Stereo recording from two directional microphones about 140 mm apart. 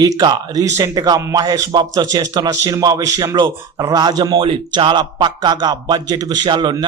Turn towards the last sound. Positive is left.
turn(degrees=-35)  # may be behind; listen again after turning